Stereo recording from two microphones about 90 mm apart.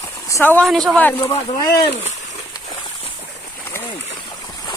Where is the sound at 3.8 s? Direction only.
45° left (ahead or behind).